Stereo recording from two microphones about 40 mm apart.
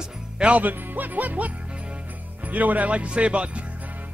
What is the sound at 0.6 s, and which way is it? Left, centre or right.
Music, right.